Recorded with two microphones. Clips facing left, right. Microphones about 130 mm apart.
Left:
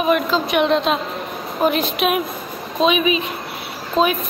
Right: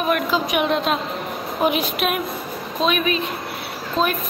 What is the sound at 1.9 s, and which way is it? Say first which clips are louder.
A woman's voice: left 3 dB; centre (ahead or behind).